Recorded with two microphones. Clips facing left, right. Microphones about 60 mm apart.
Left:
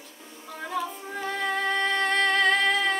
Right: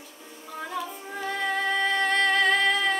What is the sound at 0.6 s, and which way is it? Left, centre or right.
Music, centre.